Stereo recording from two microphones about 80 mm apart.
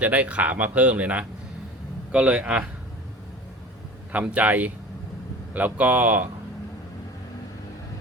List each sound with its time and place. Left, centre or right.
0.0 s speech: centre
4.1 s speech: centre